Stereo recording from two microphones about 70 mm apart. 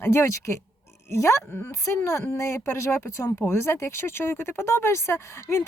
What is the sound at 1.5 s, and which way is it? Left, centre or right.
Speech, left.